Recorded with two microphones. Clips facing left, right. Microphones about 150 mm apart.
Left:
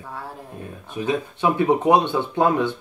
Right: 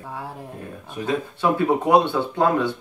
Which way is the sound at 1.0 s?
20° left (ahead or behind).